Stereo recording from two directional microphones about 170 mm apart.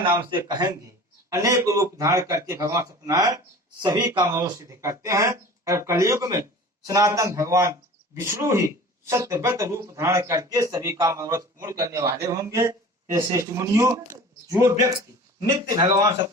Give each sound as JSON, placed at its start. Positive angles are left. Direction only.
{"t": 0.3, "sound": "speech", "side_deg": -25}
{"t": 15.4, "sound": "speech", "side_deg": -30}